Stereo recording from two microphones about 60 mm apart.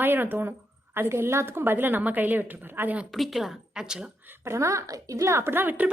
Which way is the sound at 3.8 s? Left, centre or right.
Centre.